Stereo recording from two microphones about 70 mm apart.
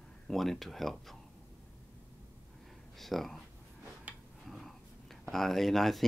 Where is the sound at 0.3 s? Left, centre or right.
Centre.